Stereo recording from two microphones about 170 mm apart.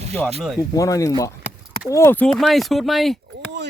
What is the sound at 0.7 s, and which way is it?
Speech, 20° left (ahead or behind).